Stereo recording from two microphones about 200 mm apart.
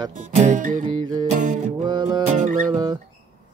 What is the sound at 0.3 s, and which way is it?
Music, 35° right (ahead or behind).